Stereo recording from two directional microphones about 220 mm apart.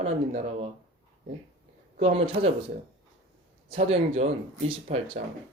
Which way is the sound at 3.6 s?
25° right (ahead or behind).